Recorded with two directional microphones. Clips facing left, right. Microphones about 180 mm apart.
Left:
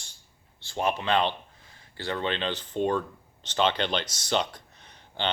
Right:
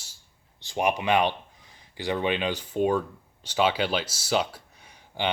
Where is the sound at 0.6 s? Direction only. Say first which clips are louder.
Right 2 dB; 15° right (ahead or behind).